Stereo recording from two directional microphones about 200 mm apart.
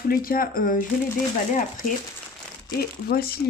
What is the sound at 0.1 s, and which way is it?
Speech, 45° left (ahead or behind).